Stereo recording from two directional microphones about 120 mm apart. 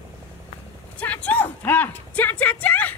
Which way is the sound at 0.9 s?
10° left (ahead or behind).